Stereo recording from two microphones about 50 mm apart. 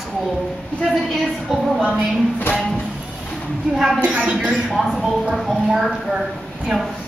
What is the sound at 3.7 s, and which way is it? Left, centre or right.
Speech, centre.